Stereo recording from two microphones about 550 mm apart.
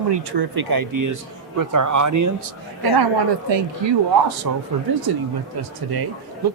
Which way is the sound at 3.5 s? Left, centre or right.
Right.